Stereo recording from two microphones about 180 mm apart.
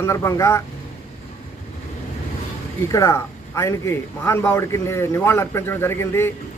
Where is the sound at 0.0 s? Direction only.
15° left (ahead or behind).